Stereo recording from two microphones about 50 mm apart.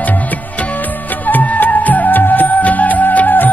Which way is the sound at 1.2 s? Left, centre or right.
Left.